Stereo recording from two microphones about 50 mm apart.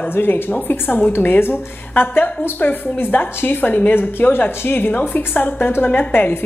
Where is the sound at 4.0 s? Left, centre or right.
Left.